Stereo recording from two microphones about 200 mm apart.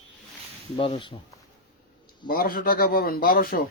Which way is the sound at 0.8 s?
25° left (ahead or behind).